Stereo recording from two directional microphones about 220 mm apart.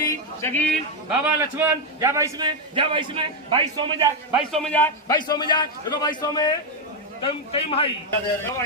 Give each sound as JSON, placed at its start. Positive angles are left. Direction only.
{"t": 0.0, "sound": "a sound", "side_deg": 10}
{"t": 1.2, "sound": "a man's voice", "side_deg": -10}
{"t": 4.3, "sound": "a man's voice", "side_deg": 0}
{"t": 5.1, "sound": "a man's voice", "side_deg": 20}